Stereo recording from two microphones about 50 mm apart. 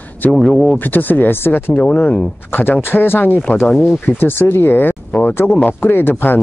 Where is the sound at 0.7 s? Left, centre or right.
Left.